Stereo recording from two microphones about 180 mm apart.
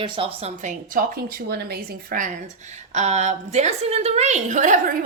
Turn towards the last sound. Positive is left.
turn(degrees=-50)  # may be behind; listen again after turning